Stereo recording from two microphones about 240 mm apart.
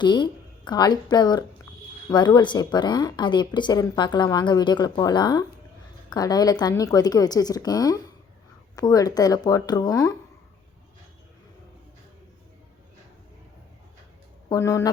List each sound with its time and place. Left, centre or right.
0.0 s a woman's voice: centre
14.5 s a woman's voice: centre